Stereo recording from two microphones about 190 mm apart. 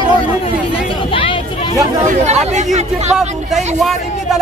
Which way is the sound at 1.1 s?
25° left (ahead or behind).